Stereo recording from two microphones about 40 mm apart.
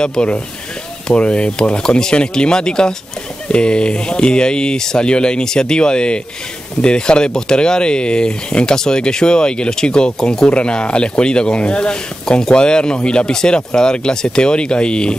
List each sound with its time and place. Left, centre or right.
0.0 s speech: centre